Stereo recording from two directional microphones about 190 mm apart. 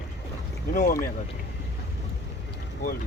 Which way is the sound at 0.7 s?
45° left (ahead or behind).